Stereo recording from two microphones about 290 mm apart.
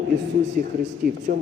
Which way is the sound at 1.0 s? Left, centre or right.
Right.